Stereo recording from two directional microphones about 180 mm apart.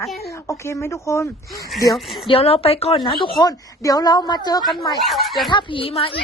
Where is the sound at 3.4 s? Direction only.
20° left (ahead or behind).